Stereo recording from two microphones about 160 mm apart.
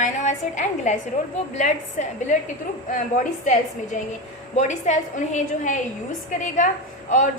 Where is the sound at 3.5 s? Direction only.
50° left (ahead or behind).